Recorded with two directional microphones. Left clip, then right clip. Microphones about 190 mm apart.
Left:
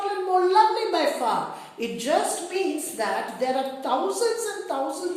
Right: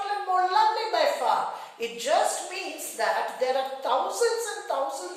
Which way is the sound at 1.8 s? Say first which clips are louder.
Even; 15° left (ahead or behind).